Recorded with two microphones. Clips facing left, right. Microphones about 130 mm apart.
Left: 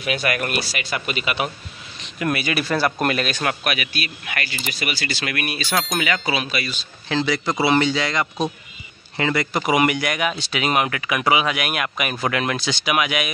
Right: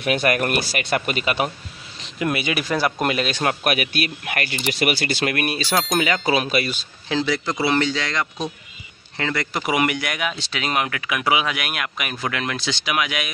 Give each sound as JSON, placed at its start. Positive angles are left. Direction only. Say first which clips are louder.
{"t": 0.0, "sound": "speech", "louder": "right 3 dB", "side_deg": -50}
{"t": 2.1, "sound": "speech", "louder": "even", "side_deg": -20}
{"t": 3.6, "sound": "speech", "louder": "right 4 dB", "side_deg": -45}
{"t": 7.1, "sound": "speech", "louder": "left 1 dB", "side_deg": -5}